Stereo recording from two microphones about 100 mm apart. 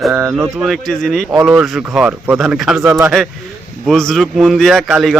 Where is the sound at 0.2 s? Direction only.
25° right (ahead or behind).